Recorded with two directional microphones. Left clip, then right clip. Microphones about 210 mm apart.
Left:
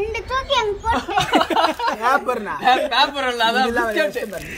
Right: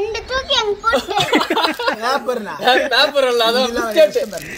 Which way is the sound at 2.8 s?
45° right (ahead or behind).